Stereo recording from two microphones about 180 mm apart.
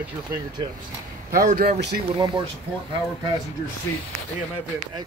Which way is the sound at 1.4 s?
55° right (ahead or behind).